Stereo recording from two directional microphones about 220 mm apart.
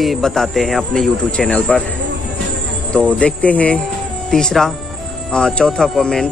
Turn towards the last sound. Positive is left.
turn(degrees=0)  # may be behind; listen again after turning